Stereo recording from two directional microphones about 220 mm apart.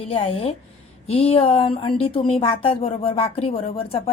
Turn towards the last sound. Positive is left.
turn(degrees=25)  # may be behind; listen again after turning